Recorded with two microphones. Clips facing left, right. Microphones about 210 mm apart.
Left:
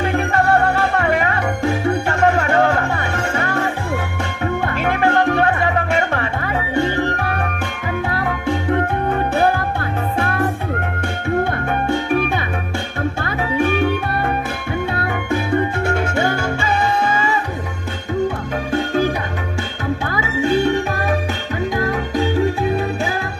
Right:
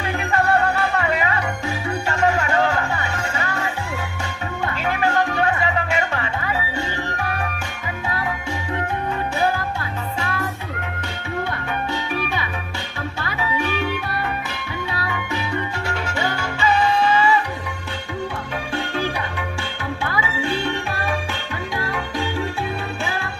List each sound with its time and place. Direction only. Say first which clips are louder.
0.0 s music: left 4 dB; 50° left (ahead or behind)
18.7 s music: left 7 dB; 45° left (ahead or behind)